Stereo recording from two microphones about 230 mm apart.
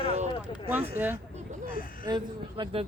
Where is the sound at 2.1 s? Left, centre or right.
Centre.